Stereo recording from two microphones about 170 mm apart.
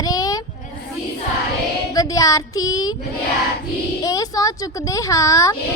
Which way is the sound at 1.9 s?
20° left (ahead or behind).